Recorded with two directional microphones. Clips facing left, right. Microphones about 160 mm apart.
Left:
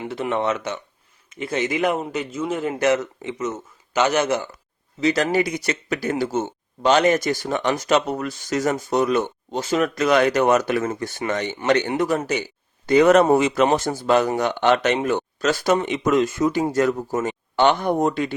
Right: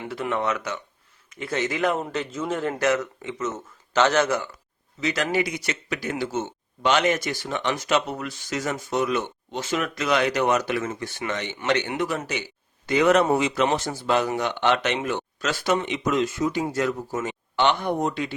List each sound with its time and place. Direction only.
0.1 s a man's voice: 25° left (ahead or behind)
3.9 s a man's voice: 15° left (ahead or behind)
4.9 s speech: 35° left (ahead or behind)